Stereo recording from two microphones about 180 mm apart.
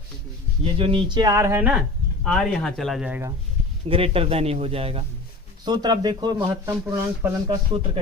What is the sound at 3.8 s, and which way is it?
A man's voice, 30° right (ahead or behind).